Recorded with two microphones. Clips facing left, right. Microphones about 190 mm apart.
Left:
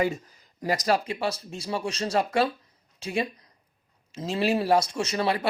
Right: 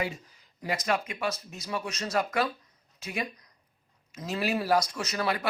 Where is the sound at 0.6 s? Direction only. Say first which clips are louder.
Left 5 dB; 40° left (ahead or behind).